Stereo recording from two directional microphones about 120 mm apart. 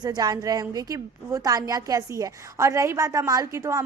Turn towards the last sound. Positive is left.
turn(degrees=-25)  # may be behind; listen again after turning